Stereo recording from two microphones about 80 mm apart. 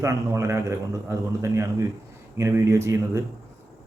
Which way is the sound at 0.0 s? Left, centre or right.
Right.